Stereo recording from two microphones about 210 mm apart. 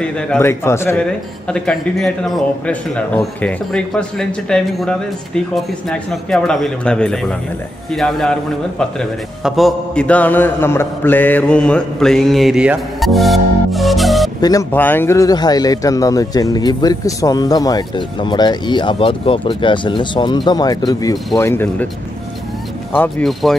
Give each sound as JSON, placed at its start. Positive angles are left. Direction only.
{"t": 0.0, "sound": "a man's voice", "side_deg": 10}
{"t": 14.4, "sound": "speech", "side_deg": 15}
{"t": 22.9, "sound": "a man's voice", "side_deg": 5}